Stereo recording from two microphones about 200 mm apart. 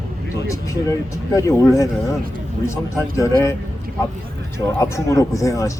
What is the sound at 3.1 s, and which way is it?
Speech, 15° left (ahead or behind).